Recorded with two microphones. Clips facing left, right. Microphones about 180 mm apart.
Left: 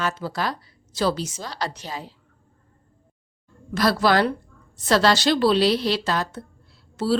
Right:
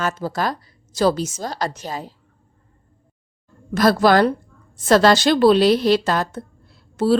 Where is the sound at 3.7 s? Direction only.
45° right (ahead or behind).